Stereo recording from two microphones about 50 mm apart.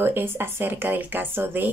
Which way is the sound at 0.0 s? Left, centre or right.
Right.